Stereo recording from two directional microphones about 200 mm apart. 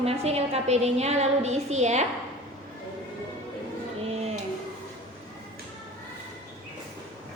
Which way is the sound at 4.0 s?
30° right (ahead or behind).